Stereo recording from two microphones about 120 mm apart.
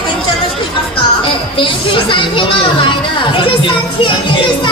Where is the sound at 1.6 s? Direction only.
45° left (ahead or behind).